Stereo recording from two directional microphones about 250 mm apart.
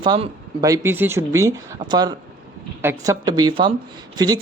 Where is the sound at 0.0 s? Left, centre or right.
Centre.